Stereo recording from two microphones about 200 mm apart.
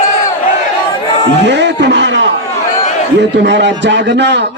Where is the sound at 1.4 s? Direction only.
60° right (ahead or behind).